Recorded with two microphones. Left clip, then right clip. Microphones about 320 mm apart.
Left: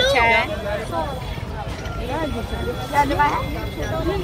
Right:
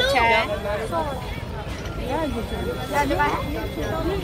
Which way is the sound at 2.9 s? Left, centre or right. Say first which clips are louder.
Left 4 dB; left.